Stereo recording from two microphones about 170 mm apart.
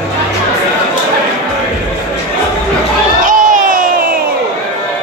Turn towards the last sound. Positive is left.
turn(degrees=-50)  # may be behind; listen again after turning